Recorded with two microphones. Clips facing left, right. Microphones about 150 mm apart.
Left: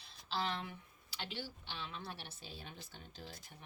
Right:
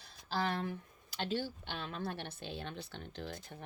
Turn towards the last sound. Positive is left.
turn(degrees=-60)  # may be behind; listen again after turning